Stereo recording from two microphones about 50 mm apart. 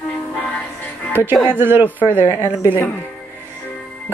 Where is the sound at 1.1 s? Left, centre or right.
Right.